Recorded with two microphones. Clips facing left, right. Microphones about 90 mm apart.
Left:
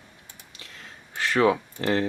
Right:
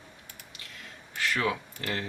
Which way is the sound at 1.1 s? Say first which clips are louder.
Left 8 dB; 35° left (ahead or behind).